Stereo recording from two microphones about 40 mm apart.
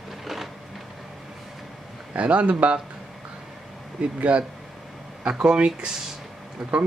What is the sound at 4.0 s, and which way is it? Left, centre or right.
Speech, right.